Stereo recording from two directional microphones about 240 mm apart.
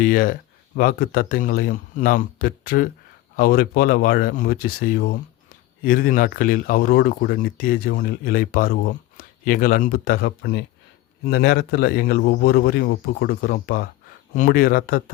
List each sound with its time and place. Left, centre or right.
0.0 s speech: left